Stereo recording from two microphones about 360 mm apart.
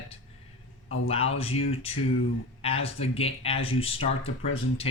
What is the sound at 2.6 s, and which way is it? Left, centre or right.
Speech, centre.